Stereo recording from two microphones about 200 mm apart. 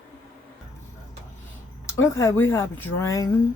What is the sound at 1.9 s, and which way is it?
Speech, 15° left (ahead or behind).